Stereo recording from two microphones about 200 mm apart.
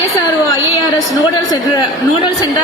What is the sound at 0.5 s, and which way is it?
A woman's voice, 20° left (ahead or behind).